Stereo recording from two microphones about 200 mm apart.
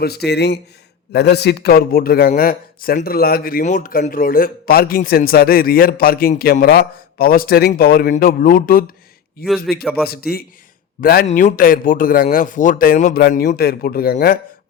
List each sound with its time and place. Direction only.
0.0 s a man's voice: 55° left (ahead or behind)
9.8 s speech: centre (ahead or behind)
10.1 s a man's voice: 50° left (ahead or behind)